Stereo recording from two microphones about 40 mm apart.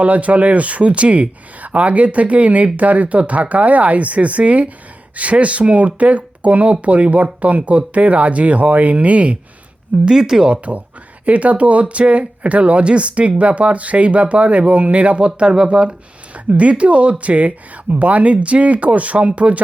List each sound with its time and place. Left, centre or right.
0.0 s speech: right
10.1 s speech: centre
10.5 s speech: right